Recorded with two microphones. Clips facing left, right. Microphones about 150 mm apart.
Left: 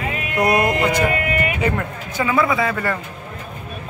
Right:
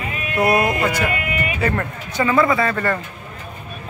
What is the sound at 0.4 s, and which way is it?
Music, centre (ahead or behind).